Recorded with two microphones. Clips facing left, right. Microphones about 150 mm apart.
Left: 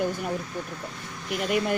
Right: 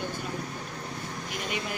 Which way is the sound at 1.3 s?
55° left (ahead or behind).